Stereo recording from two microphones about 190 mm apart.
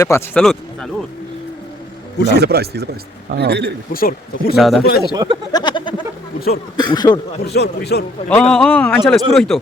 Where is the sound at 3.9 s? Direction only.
50° left (ahead or behind).